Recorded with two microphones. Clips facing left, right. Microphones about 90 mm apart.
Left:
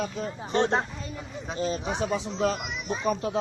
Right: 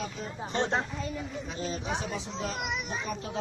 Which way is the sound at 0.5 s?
50° left (ahead or behind).